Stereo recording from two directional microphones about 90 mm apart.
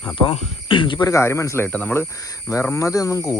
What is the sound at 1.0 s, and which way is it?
Speech, 35° left (ahead or behind).